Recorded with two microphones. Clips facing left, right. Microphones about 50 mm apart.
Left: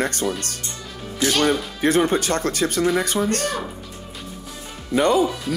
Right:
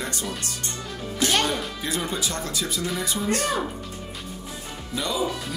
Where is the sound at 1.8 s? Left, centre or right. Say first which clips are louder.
Left 10 dB; left.